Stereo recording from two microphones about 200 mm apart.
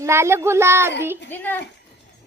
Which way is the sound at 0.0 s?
15° right (ahead or behind).